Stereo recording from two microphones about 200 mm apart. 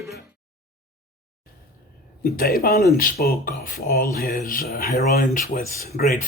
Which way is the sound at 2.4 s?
50° left (ahead or behind).